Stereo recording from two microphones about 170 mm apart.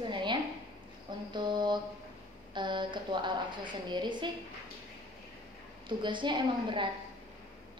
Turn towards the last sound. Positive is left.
turn(degrees=-30)  # may be behind; listen again after turning